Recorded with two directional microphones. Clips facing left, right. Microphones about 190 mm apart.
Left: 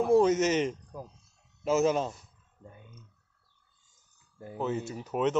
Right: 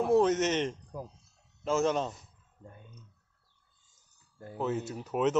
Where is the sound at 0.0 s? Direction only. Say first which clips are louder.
Left 2 dB; centre (ahead or behind).